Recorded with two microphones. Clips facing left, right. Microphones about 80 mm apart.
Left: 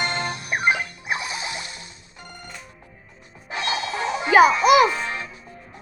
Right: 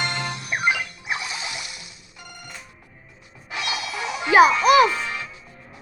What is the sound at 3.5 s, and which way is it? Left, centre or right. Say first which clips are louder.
Music: left 3 dB; left.